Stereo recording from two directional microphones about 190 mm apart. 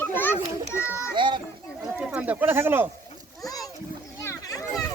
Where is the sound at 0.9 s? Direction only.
15° left (ahead or behind).